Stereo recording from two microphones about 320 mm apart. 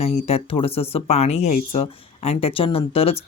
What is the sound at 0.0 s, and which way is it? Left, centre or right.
Speech, centre.